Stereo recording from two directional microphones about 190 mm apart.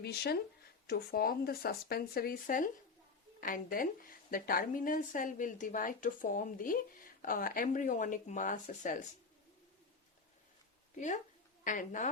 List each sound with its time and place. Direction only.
0.0 s a woman's voice: 55° left (ahead or behind); by 9.0 s 40° left (ahead or behind)
10.9 s a woman's voice: 40° left (ahead or behind)